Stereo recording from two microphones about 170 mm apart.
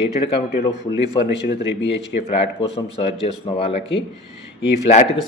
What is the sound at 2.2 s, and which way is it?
A man's voice, 35° left (ahead or behind).